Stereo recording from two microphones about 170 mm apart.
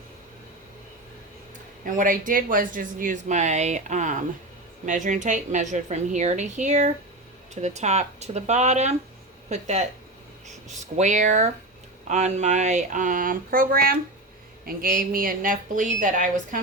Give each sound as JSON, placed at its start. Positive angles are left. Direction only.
{"t": 1.8, "sound": "speech", "side_deg": -55}
{"t": 10.9, "sound": "speech", "side_deg": -45}